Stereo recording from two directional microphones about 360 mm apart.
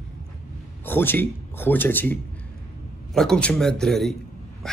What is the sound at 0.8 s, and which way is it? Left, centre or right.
A man's voice, centre.